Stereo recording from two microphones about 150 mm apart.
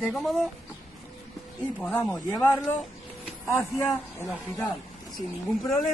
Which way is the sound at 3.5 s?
15° left (ahead or behind).